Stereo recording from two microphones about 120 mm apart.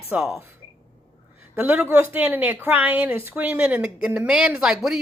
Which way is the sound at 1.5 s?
10° right (ahead or behind).